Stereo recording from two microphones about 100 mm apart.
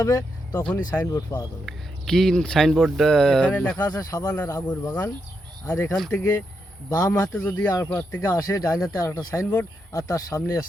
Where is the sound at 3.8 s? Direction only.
35° left (ahead or behind).